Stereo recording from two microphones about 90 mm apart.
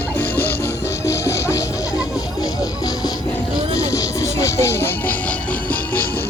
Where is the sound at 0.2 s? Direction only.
25° left (ahead or behind).